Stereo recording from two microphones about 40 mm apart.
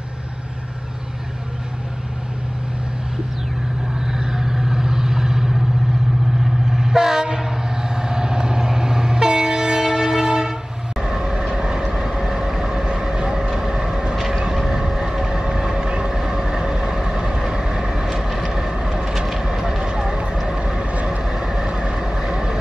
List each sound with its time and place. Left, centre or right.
4.0 s vehicle: centre
6.7 s train: centre
11.0 s vehicle: centre
14.1 s vehicle: centre; by 21.2 s right
21.2 s vehicle: centre